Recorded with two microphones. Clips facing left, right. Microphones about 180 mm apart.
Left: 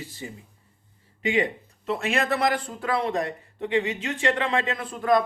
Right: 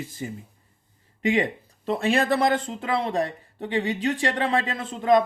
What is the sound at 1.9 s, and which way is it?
Speech, 35° right (ahead or behind).